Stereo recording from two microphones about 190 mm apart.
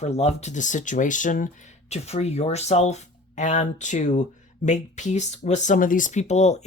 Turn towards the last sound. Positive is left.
turn(degrees=35)  # may be behind; listen again after turning